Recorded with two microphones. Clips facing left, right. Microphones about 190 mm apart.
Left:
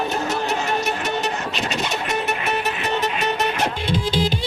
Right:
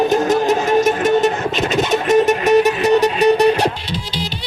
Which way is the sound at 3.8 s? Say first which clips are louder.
Left 4 dB; 50° left (ahead or behind).